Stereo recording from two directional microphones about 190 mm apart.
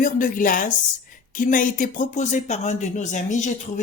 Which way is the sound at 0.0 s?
45° left (ahead or behind).